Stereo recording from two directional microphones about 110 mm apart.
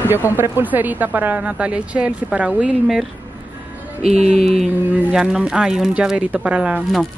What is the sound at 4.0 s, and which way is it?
Speech, 75° right (ahead or behind).